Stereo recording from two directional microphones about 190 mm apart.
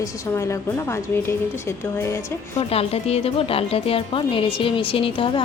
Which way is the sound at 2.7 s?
30° left (ahead or behind).